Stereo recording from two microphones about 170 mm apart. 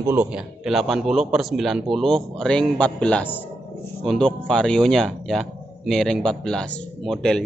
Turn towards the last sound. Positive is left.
turn(degrees=5)  # may be behind; listen again after turning